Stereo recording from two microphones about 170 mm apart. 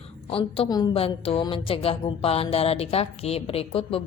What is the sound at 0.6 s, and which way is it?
Speech, 25° left (ahead or behind).